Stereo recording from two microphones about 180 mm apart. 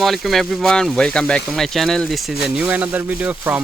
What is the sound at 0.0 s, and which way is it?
Speech, centre (ahead or behind).